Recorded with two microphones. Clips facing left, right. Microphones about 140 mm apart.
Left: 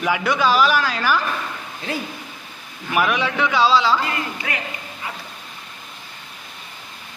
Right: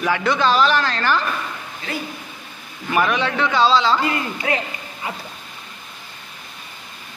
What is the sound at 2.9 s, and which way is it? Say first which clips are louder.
A man's voice: right 1 dB; 5° left (ahead or behind).